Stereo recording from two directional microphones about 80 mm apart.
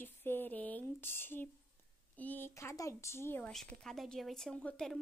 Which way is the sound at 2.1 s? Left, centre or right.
Left.